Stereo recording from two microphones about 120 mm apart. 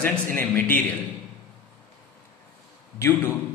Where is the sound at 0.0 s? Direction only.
15° left (ahead or behind).